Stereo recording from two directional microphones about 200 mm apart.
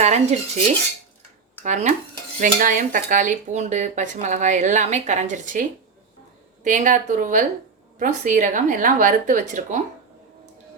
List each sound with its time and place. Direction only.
0.0 s speech: 35° right (ahead or behind)
1.6 s speech: 35° right (ahead or behind)
6.7 s speech: 40° right (ahead or behind)